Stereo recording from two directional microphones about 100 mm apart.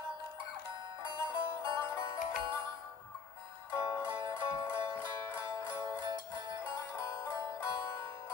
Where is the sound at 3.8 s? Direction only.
50° right (ahead or behind).